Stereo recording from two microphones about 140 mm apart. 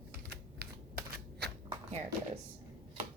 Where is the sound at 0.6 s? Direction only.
90° right.